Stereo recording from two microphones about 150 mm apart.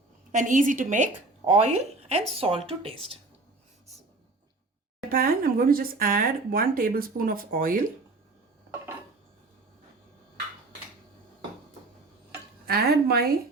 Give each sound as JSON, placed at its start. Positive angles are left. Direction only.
{"t": 0.3, "sound": "a woman's voice", "side_deg": -60}
{"t": 5.0, "sound": "speech", "side_deg": -75}
{"t": 12.6, "sound": "speech", "side_deg": -90}